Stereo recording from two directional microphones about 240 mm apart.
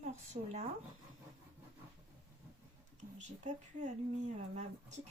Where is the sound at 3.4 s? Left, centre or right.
Right.